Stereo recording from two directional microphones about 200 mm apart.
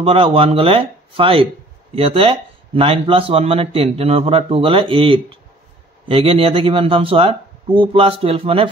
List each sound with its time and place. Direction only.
0.0 s speech: 30° right (ahead or behind)